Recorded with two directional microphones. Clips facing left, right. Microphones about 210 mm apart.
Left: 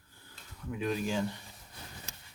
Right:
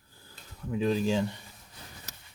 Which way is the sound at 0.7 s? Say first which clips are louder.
Right 6 dB; 30° right (ahead or behind).